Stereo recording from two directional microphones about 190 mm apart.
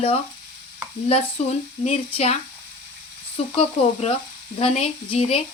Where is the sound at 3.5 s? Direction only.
30° left (ahead or behind).